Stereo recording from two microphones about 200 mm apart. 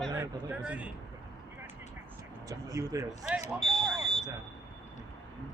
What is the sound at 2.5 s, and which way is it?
Speech, 15° right (ahead or behind).